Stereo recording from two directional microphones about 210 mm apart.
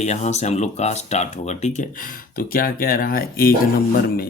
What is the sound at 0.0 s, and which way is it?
Speech, 35° left (ahead or behind).